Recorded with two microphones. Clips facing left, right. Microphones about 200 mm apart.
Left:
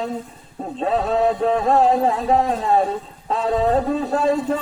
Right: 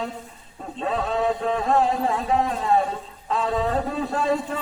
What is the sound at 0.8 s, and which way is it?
A man's voice, 35° left (ahead or behind).